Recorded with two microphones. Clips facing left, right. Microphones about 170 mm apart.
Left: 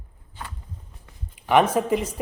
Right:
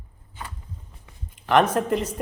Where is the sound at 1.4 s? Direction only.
10° left (ahead or behind).